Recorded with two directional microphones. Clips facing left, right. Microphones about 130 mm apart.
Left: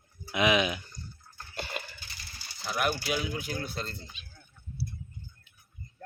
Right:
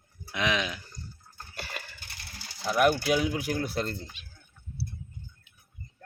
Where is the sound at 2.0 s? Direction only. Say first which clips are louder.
Right 2 dB; 60° right (ahead or behind).